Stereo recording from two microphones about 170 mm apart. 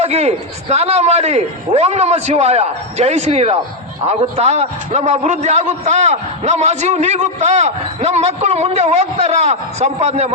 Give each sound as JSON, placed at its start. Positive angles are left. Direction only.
{"t": 0.0, "sound": "a man's voice", "side_deg": -40}